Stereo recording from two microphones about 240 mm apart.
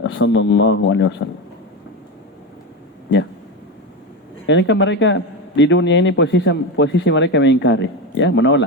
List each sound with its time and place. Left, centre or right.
0.0 s a man's voice: left
4.4 s a man's voice: left